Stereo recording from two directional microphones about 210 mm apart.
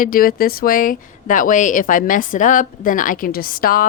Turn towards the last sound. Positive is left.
turn(degrees=45)  # may be behind; listen again after turning